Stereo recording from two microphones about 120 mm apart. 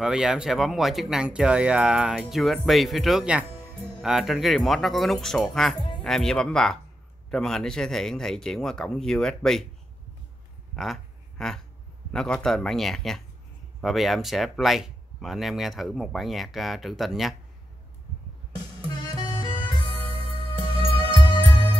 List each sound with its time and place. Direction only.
0.0 s speech: 5° right (ahead or behind)
5.8 s music: 45° left (ahead or behind)
6.0 s speech: 5° left (ahead or behind)
10.8 s a sound: 5° left (ahead or behind)
12.1 s speech: 5° left (ahead or behind)
19.0 s music: 30° left (ahead or behind)